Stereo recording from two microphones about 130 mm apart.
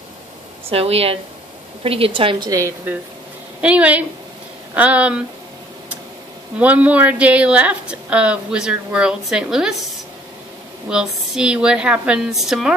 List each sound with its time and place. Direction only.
0.7 s speech: 50° right (ahead or behind)
3.6 s a woman's voice: 10° right (ahead or behind)
6.6 s a woman's voice: 10° right (ahead or behind)
10.9 s a woman's voice: 5° right (ahead or behind)